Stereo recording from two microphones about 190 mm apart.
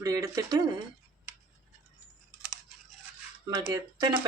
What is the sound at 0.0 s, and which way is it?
Speech, 15° right (ahead or behind).